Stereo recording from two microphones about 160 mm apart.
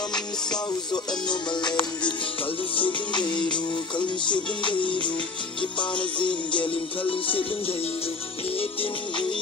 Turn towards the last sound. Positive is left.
turn(degrees=35)  # may be behind; listen again after turning